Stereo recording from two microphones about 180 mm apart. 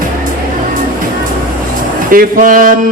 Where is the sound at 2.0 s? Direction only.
50° right (ahead or behind).